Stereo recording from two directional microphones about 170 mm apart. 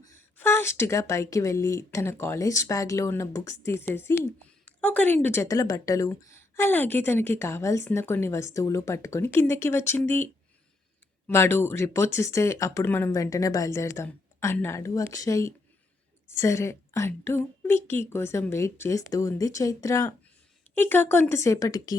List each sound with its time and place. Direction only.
0.0 s speech: 15° left (ahead or behind)